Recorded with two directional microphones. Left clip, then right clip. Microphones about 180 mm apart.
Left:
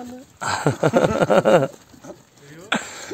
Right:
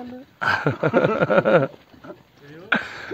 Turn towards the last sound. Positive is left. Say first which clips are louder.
# right 2 dB
turn(degrees=15)  # may be behind; listen again after turning